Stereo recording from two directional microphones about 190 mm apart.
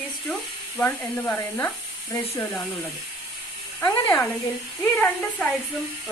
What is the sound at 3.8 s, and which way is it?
A woman's voice, 10° left (ahead or behind).